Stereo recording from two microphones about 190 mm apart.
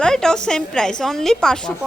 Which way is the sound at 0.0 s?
5° left (ahead or behind).